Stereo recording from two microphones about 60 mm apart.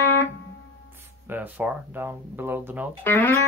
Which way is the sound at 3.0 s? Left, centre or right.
Left.